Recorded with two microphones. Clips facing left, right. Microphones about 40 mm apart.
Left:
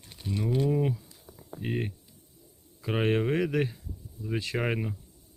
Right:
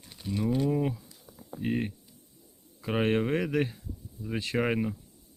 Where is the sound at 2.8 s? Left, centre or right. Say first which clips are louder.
Even; centre.